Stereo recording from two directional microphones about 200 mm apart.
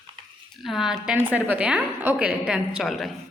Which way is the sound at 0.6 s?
Centre (ahead or behind).